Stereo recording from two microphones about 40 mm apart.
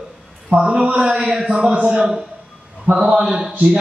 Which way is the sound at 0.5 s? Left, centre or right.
Right.